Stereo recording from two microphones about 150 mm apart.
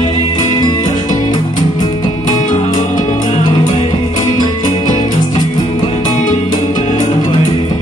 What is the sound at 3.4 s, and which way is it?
Music, 30° left (ahead or behind).